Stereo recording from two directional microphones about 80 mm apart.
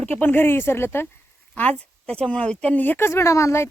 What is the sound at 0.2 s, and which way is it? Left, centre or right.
Speech, left.